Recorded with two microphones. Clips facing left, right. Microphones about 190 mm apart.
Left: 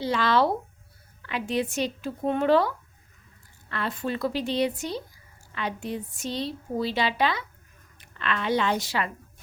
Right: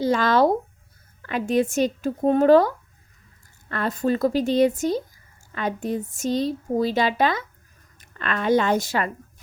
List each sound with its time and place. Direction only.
0.0 s a woman's voice: 45° right (ahead or behind)